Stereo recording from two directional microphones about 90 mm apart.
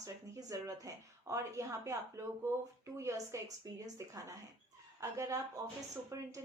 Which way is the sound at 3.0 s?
35° right (ahead or behind).